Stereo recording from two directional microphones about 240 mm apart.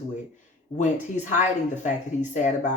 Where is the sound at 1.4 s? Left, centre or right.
Left.